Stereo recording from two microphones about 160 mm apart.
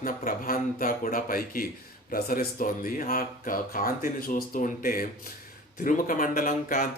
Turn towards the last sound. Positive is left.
turn(degrees=60)  # may be behind; listen again after turning